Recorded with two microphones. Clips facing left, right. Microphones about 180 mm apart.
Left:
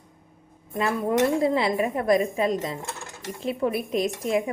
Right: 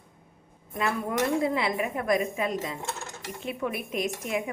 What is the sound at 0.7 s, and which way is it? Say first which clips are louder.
Speech: left 5 dB; 30° left (ahead or behind).